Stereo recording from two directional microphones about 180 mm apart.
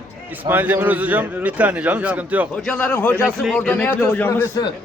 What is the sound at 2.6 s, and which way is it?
A man's voice, 5° left (ahead or behind).